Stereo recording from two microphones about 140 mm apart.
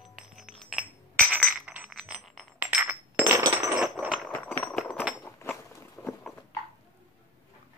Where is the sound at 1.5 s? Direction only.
10° right (ahead or behind).